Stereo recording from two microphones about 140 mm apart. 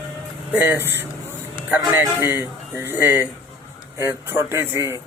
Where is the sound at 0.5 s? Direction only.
15° right (ahead or behind).